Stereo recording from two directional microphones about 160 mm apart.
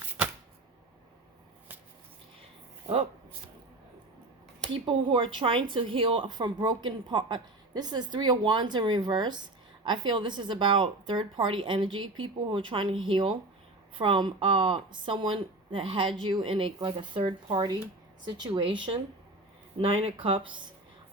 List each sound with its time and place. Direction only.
2.8 s speech: 35° right (ahead or behind)
4.9 s a woman's voice: 35° right (ahead or behind)